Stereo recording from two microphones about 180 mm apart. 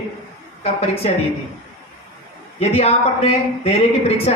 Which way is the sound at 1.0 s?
35° left (ahead or behind).